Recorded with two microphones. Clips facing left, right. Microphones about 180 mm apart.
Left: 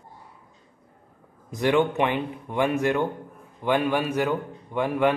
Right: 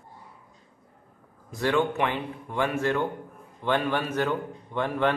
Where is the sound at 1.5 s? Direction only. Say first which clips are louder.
Left 3 dB; 20° left (ahead or behind).